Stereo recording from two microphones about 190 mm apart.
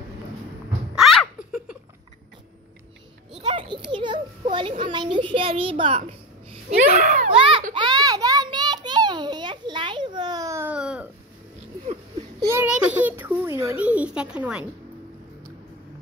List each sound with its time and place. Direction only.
0.9 s giggle: centre (ahead or behind)
3.4 s a child's voice: 25° right (ahead or behind)
6.9 s a child's voice: 45° right (ahead or behind)
7.3 s a child's voice: 30° right (ahead or behind)
7.7 s a sound: 25° right (ahead or behind); by 11.1 s 5° right (ahead or behind)
12.4 s a sound: 15° right (ahead or behind)
12.6 s a child's voice: 5° right (ahead or behind)